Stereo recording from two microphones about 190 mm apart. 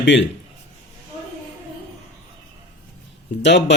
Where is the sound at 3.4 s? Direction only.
70° left (ahead or behind).